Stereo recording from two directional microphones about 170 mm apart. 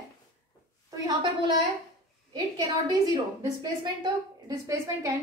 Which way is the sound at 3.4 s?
25° right (ahead or behind).